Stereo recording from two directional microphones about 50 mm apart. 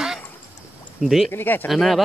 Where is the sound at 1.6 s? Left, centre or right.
Centre.